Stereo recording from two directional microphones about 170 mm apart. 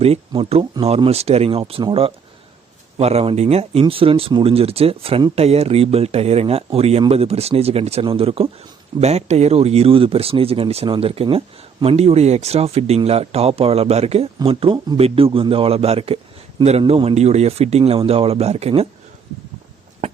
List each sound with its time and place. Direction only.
0.0 s speech: 35° right (ahead or behind)